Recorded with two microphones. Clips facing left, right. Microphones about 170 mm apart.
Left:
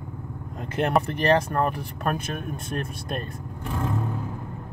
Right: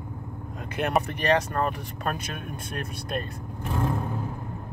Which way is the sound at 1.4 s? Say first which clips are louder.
Left 2 dB; 45° left (ahead or behind).